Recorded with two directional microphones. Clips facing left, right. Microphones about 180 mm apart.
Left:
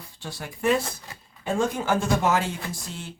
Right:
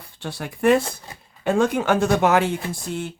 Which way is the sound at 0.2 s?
60° right (ahead or behind).